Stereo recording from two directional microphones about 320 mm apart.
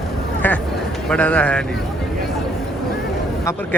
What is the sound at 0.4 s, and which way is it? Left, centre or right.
Speech, centre.